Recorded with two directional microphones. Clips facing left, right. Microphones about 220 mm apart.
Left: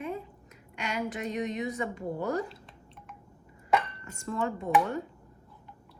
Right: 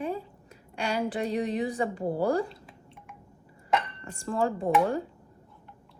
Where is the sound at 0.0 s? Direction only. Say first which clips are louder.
Right 3 dB; 35° right (ahead or behind).